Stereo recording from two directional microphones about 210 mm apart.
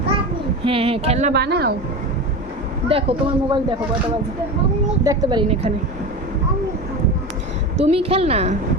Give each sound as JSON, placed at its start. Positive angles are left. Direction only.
{"t": 0.6, "sound": "a woman's voice", "side_deg": -25}
{"t": 1.3, "sound": "a woman's voice", "side_deg": -50}
{"t": 2.9, "sound": "a woman's voice", "side_deg": -25}
{"t": 5.0, "sound": "a woman's voice", "side_deg": -20}
{"t": 7.8, "sound": "a woman's voice", "side_deg": -30}